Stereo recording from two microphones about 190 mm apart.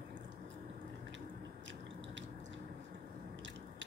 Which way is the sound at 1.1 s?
75° right (ahead or behind).